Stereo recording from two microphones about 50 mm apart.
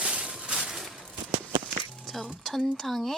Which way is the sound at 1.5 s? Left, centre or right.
Centre.